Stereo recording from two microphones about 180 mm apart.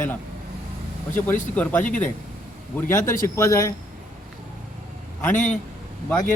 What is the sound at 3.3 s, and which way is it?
Speech, 15° left (ahead or behind).